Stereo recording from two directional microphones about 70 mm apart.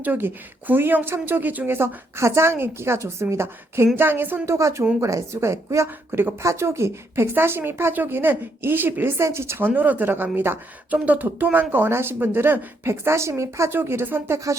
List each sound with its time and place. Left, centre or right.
0.0 s a woman's voice: right
4.4 s a woman's voice: right